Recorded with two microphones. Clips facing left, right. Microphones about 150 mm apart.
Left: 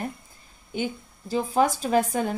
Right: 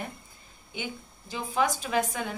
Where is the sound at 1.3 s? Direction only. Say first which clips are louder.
Left 6 dB; 40° left (ahead or behind).